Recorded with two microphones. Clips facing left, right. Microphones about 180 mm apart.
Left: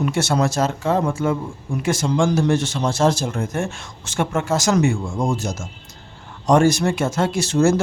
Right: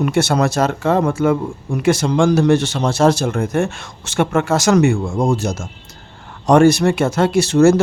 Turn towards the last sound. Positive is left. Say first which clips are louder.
# right 6 dB
turn(degrees=-70)  # may be behind; listen again after turning